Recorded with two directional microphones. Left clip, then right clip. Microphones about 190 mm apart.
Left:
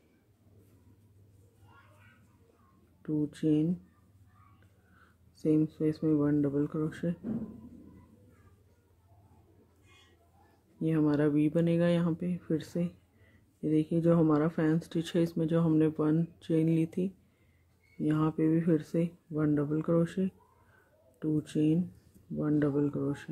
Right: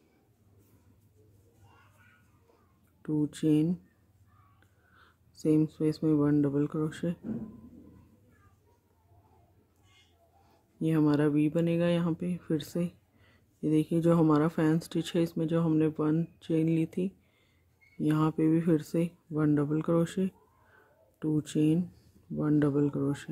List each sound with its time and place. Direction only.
3.0 s speech: 15° right (ahead or behind)
4.9 s speech: 15° right (ahead or behind)
10.8 s speech: 15° right (ahead or behind)